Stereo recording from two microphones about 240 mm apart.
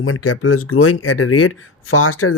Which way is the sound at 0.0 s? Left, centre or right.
Left.